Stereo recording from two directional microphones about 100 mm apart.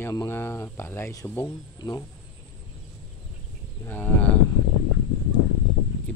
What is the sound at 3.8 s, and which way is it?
Moo, 20° left (ahead or behind).